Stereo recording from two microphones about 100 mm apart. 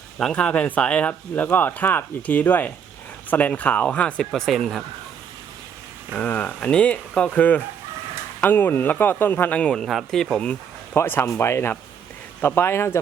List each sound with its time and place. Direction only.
0.2 s speech: 10° left (ahead or behind)
4.3 s speech: centre (ahead or behind)
6.1 s speech: 15° left (ahead or behind)
10.9 s speech: 20° left (ahead or behind)